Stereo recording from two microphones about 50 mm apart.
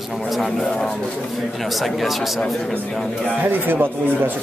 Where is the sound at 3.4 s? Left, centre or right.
Right.